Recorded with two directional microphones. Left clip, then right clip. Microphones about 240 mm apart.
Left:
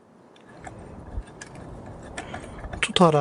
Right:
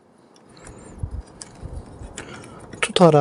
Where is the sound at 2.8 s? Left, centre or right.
Centre.